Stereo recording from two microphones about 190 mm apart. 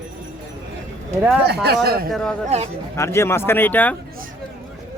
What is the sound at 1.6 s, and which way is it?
Speech, 55° right (ahead or behind).